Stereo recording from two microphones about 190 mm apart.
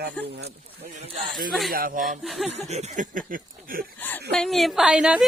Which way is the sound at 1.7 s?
50° right (ahead or behind).